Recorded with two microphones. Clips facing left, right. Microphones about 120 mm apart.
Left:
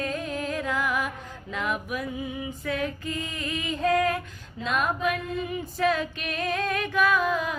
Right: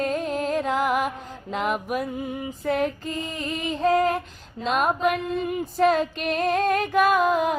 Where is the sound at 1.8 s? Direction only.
50° right (ahead or behind); by 4.8 s 30° right (ahead or behind).